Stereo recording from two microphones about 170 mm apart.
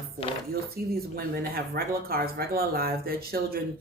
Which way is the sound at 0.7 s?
60° right (ahead or behind).